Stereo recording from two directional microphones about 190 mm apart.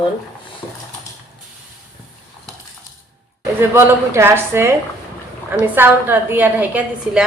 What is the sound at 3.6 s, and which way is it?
A woman's voice, 10° right (ahead or behind).